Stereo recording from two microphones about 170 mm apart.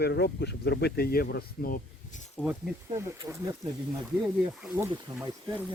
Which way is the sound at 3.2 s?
20° right (ahead or behind).